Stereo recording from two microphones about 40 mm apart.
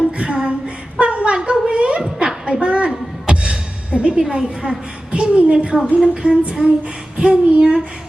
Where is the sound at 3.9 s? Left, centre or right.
Right.